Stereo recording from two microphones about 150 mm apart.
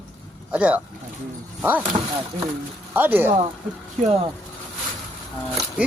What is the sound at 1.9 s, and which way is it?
Speech, 35° right (ahead or behind).